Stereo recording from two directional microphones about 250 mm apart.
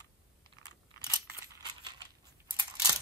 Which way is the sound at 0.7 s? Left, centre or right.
Centre.